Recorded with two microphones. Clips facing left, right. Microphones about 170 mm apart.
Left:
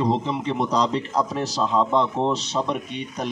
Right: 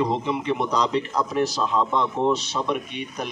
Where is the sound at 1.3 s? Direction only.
30° left (ahead or behind).